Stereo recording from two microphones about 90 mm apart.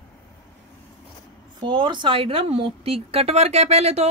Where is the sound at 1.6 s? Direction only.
60° right (ahead or behind); by 3.2 s 90° right.